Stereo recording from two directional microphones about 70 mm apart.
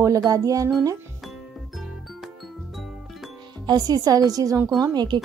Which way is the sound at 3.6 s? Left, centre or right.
Right.